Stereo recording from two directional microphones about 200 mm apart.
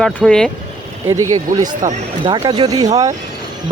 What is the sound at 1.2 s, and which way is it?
Speech, 90° right.